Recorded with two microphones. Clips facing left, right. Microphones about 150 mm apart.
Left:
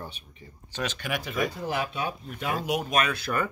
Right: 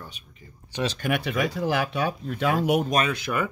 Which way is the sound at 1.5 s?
85° right.